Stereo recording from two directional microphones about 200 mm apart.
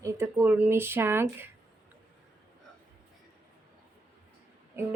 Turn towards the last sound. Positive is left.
turn(degrees=-15)  # may be behind; listen again after turning